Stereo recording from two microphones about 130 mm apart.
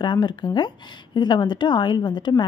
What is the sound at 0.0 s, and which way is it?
Speech, 35° left (ahead or behind).